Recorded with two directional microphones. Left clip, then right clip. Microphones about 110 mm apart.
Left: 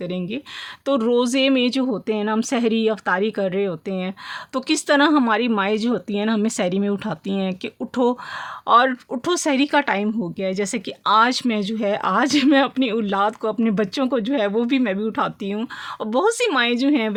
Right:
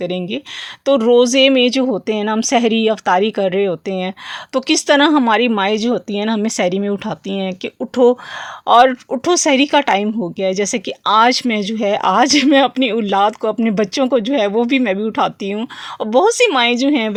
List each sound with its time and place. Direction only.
0.0 s speech: 30° right (ahead or behind); by 8.2 s 10° right (ahead or behind)
8.6 s speech: 20° right (ahead or behind)